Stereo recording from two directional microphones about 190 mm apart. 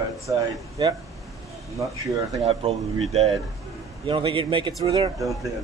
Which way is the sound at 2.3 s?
30° right (ahead or behind).